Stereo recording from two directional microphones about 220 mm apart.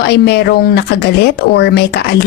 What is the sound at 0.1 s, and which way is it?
A woman's voice, 50° left (ahead or behind).